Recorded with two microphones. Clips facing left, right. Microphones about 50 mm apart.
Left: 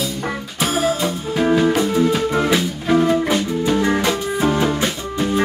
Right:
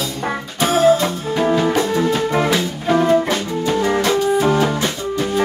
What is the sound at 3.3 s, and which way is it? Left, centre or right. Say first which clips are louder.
Music: left 1 dB; centre.